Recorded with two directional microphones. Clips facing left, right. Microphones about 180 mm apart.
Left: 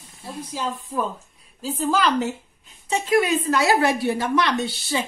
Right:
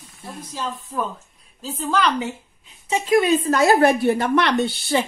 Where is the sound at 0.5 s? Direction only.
10° left (ahead or behind).